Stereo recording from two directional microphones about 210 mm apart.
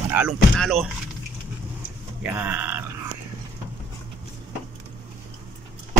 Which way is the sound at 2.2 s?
10° right (ahead or behind).